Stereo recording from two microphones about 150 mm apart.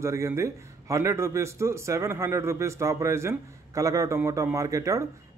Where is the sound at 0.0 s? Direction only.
20° right (ahead or behind).